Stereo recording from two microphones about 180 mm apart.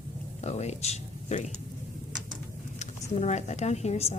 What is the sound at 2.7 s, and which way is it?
Speech, 40° left (ahead or behind).